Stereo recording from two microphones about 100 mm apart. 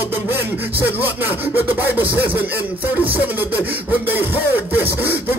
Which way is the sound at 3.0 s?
15° right (ahead or behind).